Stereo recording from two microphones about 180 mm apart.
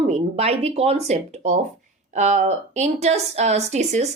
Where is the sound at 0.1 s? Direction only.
35° right (ahead or behind).